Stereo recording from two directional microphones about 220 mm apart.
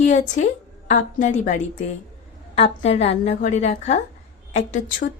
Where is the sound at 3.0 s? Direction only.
30° left (ahead or behind).